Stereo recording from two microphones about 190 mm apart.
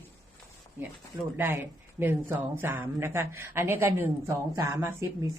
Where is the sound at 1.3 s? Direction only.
10° right (ahead or behind).